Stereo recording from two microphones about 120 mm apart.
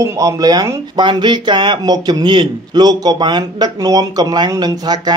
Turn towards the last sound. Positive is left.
turn(degrees=-35)  # may be behind; listen again after turning